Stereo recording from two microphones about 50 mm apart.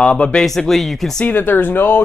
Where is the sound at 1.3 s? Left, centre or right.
Left.